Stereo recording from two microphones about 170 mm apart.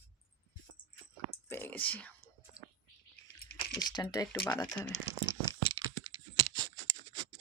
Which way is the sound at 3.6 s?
25° left (ahead or behind).